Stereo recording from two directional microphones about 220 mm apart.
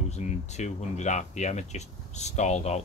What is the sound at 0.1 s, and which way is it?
Speech, 30° left (ahead or behind).